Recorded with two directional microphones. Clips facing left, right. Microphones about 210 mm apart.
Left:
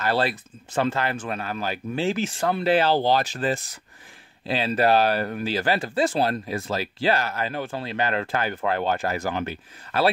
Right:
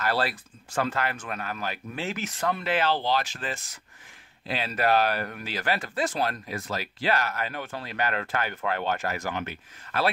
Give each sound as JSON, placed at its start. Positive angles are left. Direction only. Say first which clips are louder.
{"t": 0.0, "sound": "speech", "louder": "left 4 dB", "side_deg": 25}